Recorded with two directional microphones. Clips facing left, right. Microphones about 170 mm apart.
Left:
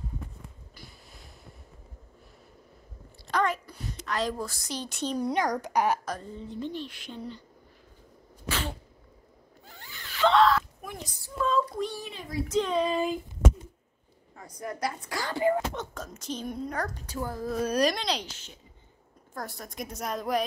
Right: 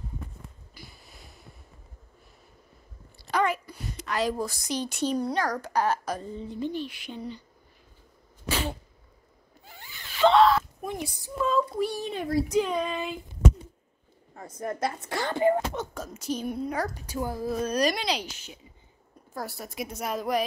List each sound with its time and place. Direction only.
3.3 s a woman's voice: 5° right (ahead or behind)
5.2 s a child's voice: 20° left (ahead or behind)
6.0 s a woman's voice: 10° right (ahead or behind)
8.5 s sneeze: 15° right (ahead or behind)
9.7 s zipper: 15° right (ahead or behind)
11.4 s child singing: centre (ahead or behind)
12.1 s a woman's voice: 55° right (ahead or behind)
12.4 s a woman's voice: 10° right (ahead or behind)
12.7 s a sound: 35° left (ahead or behind)
14.8 s speech: 25° right (ahead or behind)
15.7 s a woman's voice: 10° right (ahead or behind)
17.6 s a woman's voice: 5° left (ahead or behind)